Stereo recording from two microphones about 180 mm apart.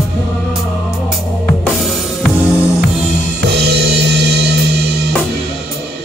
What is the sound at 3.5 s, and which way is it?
Music, 65° right (ahead or behind).